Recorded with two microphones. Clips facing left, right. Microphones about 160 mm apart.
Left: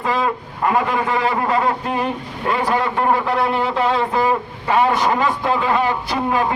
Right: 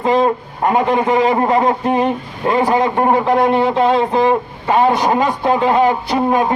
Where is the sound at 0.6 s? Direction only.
20° right (ahead or behind).